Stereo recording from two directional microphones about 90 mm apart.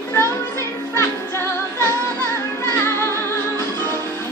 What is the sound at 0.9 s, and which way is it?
Music, 30° left (ahead or behind).